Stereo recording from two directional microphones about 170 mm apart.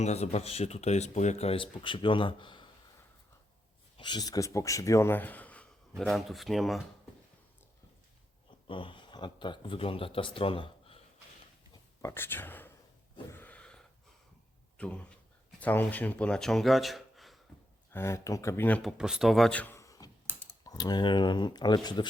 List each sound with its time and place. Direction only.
0.0 s speech: 40° left (ahead or behind)
3.9 s speech: 25° left (ahead or behind); by 6.8 s centre (ahead or behind)
8.6 s speech: 30° left (ahead or behind)
11.7 s writing: 15° left (ahead or behind)
13.3 s a sound: 10° left (ahead or behind)
14.8 s speech: 5° left (ahead or behind)
17.9 s speech: 15° left (ahead or behind)
18.8 s speech: centre (ahead or behind); by 20.1 s 20° left (ahead or behind)
20.3 s computer keyboard: 10° left (ahead or behind)
20.7 s speech: 25° left (ahead or behind)